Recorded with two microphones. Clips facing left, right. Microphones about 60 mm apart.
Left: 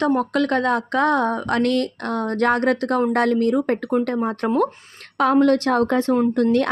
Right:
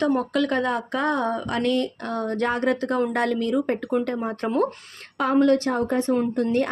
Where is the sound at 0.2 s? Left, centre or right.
Left.